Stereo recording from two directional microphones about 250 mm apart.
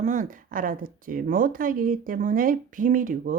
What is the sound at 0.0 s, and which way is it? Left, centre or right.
Speech, right.